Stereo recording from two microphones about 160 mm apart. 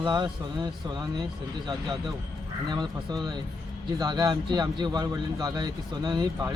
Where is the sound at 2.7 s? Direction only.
25° right (ahead or behind).